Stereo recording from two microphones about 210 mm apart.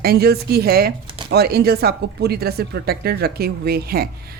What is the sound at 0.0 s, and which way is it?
Speech, 50° right (ahead or behind).